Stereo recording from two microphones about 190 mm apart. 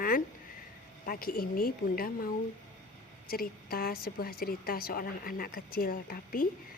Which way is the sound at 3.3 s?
50° left (ahead or behind).